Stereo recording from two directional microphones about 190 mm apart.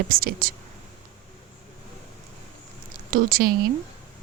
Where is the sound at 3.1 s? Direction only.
50° right (ahead or behind).